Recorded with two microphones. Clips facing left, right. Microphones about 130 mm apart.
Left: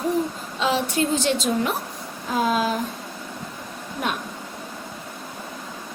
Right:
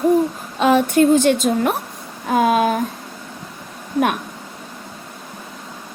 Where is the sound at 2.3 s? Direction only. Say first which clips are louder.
Right 6 dB; 60° right (ahead or behind).